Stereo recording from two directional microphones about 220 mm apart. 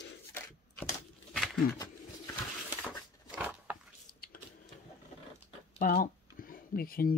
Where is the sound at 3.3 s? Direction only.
5° right (ahead or behind).